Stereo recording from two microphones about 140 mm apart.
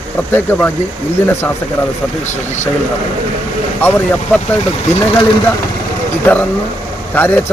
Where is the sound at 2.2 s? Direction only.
55° left (ahead or behind).